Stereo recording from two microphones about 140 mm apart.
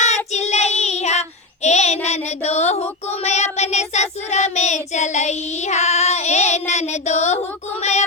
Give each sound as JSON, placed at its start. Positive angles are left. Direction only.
{"t": 0.3, "sound": "child singing", "side_deg": 50}